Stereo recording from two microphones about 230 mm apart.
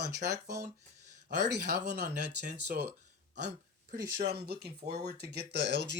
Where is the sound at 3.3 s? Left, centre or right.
Right.